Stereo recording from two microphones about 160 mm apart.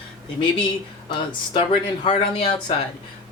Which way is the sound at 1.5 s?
35° left (ahead or behind).